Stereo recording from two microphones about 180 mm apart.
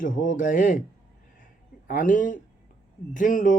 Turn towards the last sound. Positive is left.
turn(degrees=50)  # may be behind; listen again after turning